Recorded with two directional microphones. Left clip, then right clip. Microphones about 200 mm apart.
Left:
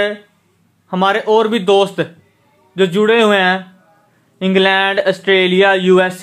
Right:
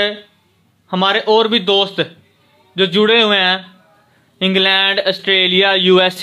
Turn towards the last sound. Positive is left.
turn(degrees=-10)  # may be behind; listen again after turning